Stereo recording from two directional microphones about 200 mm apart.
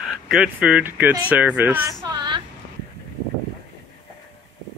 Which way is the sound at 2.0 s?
20° right (ahead or behind).